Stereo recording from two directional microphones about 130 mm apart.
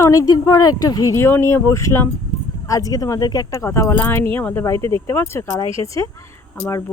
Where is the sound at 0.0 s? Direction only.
25° left (ahead or behind).